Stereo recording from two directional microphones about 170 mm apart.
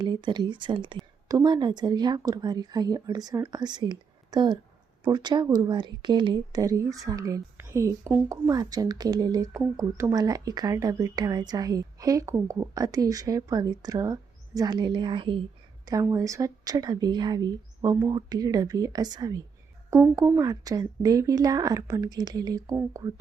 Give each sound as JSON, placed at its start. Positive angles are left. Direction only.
{"t": 0.0, "sound": "speech", "side_deg": -25}